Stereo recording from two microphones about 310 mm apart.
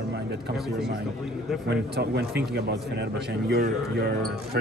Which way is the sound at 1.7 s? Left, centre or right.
Right.